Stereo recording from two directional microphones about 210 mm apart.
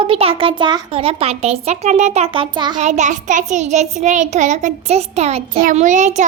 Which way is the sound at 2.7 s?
35° right (ahead or behind).